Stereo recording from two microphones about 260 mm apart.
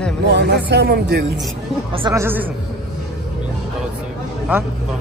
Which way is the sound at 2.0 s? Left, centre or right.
Centre.